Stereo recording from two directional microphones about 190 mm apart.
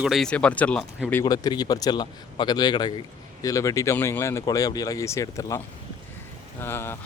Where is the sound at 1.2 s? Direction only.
20° left (ahead or behind).